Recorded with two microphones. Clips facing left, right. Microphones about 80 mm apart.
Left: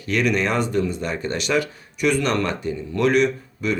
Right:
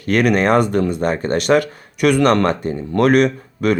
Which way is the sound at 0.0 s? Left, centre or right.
Right.